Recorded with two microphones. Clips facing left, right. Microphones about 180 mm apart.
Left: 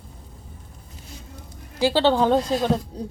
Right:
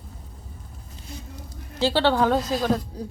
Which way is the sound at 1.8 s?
15° left (ahead or behind).